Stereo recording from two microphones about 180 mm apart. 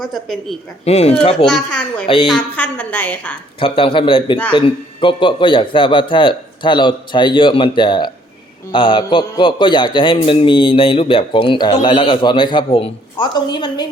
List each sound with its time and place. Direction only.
0.0 s a woman's voice: centre (ahead or behind)
0.9 s speech: 35° left (ahead or behind)
1.5 s a woman's voice: 5° left (ahead or behind)
3.6 s a man's voice: 30° left (ahead or behind)